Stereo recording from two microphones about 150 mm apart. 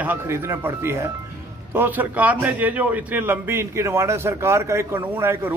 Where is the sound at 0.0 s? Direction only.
15° right (ahead or behind).